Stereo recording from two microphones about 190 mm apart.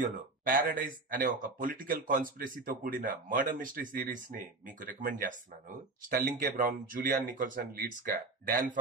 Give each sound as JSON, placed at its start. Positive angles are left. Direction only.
{"t": 0.0, "sound": "speech", "side_deg": -45}